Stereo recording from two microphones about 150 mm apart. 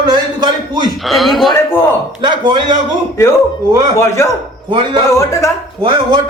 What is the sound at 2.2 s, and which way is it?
Speech, 30° right (ahead or behind).